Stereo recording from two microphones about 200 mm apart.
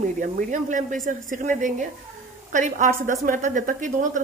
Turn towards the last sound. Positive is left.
turn(degrees=-40)  # may be behind; listen again after turning